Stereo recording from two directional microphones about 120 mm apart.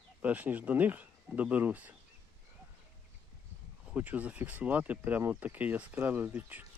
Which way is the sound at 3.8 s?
15° right (ahead or behind).